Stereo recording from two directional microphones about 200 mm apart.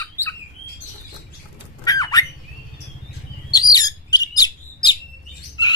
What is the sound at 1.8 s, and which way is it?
Squawk, 20° left (ahead or behind).